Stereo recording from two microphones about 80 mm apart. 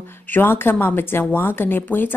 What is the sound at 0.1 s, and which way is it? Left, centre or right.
A woman's voice, left.